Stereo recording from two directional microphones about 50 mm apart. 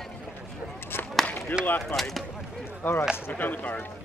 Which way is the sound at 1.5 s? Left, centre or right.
Left.